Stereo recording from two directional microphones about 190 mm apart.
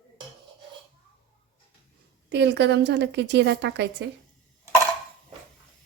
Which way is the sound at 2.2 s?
65° right (ahead or behind).